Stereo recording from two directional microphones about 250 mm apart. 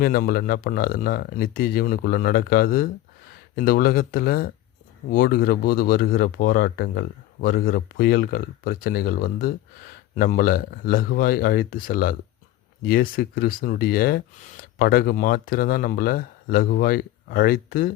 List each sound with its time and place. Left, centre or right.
0.0 s speech: left